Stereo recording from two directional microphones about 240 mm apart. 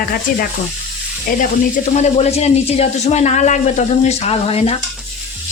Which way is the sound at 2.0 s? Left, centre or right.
Left.